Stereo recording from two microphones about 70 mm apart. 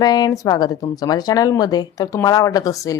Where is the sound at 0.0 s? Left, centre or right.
Left.